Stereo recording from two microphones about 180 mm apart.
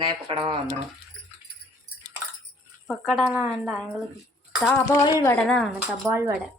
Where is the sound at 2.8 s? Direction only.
Centre (ahead or behind).